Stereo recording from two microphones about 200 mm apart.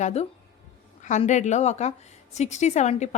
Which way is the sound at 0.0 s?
35° left (ahead or behind).